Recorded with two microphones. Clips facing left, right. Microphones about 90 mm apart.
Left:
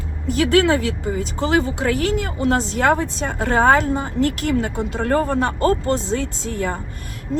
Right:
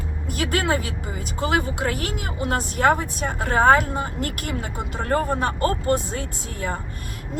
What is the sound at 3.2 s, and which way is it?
Speech, 45° right (ahead or behind).